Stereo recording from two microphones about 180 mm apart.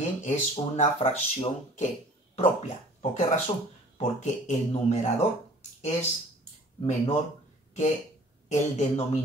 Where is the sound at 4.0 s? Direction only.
40° left (ahead or behind).